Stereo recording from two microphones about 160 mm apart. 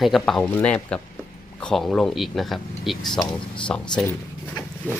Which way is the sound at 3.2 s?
30° left (ahead or behind).